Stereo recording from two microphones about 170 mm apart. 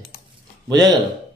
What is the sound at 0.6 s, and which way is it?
Speech, 20° right (ahead or behind).